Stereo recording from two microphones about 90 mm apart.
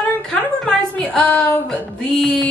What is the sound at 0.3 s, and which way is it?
Music, 10° left (ahead or behind).